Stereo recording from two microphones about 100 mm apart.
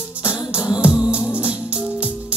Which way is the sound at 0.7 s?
10° right (ahead or behind).